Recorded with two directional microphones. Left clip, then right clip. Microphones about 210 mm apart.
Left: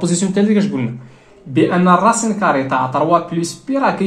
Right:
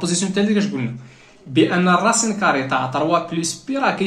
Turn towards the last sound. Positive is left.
turn(degrees=15)  # may be behind; listen again after turning